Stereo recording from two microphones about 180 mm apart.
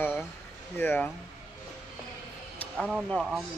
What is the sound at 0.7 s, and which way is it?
Speech, 10° left (ahead or behind).